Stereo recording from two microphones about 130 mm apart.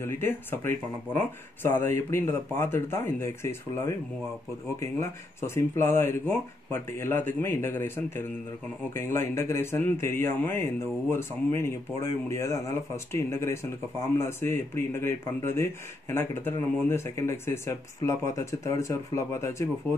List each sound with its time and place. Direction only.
0.0 s a man's voice: 15° left (ahead or behind)